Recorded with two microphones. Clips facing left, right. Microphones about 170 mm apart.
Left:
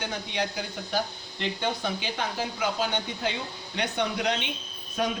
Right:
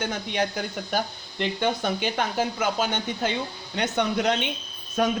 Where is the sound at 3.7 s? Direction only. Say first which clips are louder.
Right 4 dB; 50° right (ahead or behind).